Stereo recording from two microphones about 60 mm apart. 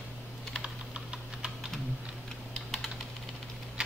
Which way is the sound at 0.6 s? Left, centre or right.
Centre.